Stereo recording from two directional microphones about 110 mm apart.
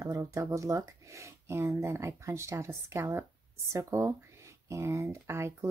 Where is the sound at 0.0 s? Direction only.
30° right (ahead or behind).